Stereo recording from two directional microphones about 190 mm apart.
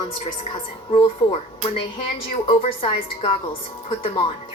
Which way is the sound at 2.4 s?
30° left (ahead or behind).